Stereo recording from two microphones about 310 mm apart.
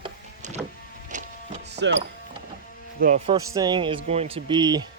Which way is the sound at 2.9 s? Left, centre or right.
Right.